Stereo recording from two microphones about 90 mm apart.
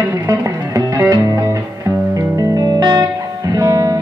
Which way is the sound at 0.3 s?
40° right (ahead or behind).